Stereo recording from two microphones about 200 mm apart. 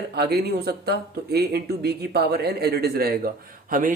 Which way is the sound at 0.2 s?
55° right (ahead or behind).